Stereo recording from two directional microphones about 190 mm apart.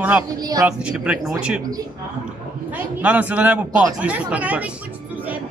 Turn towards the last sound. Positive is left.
turn(degrees=-5)  # may be behind; listen again after turning